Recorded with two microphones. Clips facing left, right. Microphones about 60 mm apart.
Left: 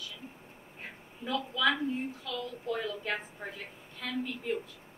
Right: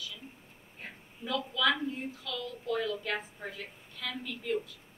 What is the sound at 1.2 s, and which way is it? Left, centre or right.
A woman's voice, left.